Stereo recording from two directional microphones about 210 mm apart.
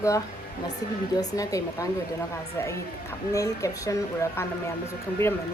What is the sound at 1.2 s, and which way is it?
Speech, 15° left (ahead or behind).